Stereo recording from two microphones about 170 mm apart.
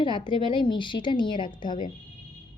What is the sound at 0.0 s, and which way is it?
A woman's voice, 30° left (ahead or behind).